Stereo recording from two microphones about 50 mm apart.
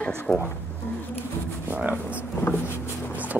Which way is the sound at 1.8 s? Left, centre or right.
Right.